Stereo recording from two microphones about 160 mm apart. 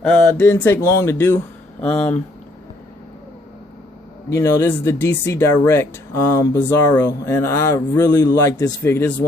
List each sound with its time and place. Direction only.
0.0 s speech: 10° left (ahead or behind)
4.3 s speech: 20° left (ahead or behind)